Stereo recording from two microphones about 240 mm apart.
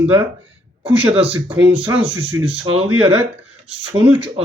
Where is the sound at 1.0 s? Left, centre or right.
Centre.